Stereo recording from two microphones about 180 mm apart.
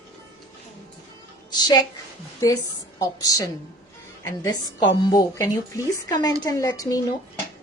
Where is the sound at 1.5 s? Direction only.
20° left (ahead or behind).